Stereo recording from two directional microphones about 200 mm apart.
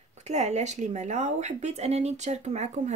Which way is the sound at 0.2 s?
35° right (ahead or behind).